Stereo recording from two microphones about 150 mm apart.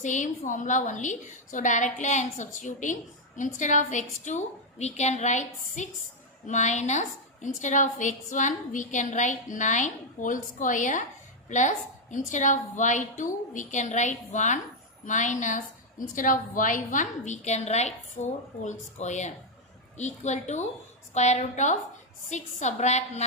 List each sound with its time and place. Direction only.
0.0 s a woman's voice: 55° left (ahead or behind)